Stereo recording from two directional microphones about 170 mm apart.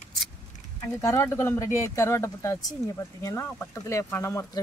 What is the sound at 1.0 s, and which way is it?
Speech, 15° left (ahead or behind).